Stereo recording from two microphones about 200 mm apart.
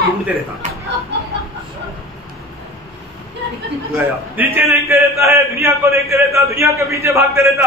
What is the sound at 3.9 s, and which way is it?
A man's voice, 10° right (ahead or behind).